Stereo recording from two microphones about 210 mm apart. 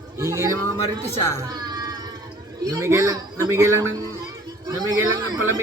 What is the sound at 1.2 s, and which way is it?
Speech, 10° left (ahead or behind).